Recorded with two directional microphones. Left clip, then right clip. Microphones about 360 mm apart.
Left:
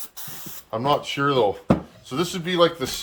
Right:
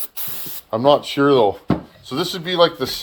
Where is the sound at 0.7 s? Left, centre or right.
Centre.